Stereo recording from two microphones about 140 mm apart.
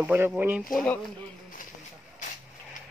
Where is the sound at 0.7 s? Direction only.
5° left (ahead or behind).